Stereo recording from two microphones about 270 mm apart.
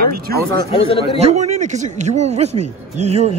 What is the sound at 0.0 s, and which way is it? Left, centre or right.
Speech, right.